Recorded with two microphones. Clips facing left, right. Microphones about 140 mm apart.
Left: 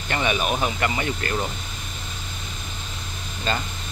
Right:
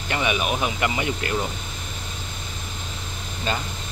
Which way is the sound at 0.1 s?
10° right (ahead or behind).